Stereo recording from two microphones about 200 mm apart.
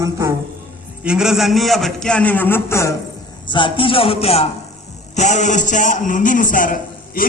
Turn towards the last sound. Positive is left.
turn(degrees=45)  # may be behind; listen again after turning